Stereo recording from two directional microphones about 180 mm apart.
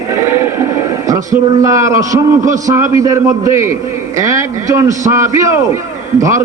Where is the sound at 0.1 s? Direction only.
15° right (ahead or behind).